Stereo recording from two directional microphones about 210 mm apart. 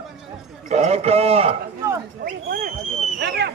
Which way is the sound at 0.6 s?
30° right (ahead or behind).